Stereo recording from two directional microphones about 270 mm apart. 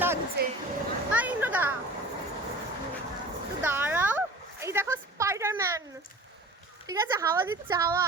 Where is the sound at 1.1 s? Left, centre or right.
Centre.